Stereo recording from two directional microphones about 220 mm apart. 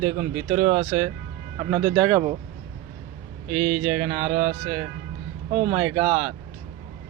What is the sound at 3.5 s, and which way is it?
Speech, 40° right (ahead or behind).